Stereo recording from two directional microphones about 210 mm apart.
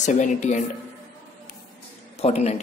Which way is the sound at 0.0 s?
35° left (ahead or behind).